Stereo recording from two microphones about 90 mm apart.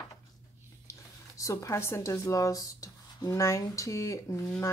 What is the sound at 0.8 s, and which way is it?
Speech, 35° left (ahead or behind).